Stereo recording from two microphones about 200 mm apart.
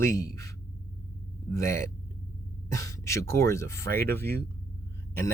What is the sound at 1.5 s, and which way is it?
Speech, 15° left (ahead or behind).